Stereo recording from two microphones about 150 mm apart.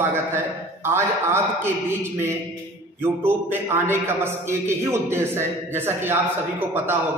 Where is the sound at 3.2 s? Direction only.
15° right (ahead or behind).